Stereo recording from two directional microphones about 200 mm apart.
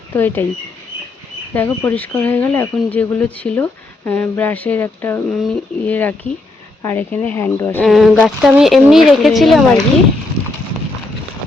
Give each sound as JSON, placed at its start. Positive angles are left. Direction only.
{"t": 0.1, "sound": "speech", "side_deg": 10}
{"t": 1.5, "sound": "speech", "side_deg": 10}